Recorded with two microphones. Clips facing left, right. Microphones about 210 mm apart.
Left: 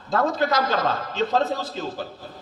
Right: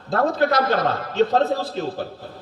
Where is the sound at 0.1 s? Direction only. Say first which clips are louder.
Right 3 dB; 60° right (ahead or behind).